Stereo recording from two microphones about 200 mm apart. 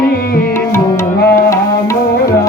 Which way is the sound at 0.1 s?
50° left (ahead or behind).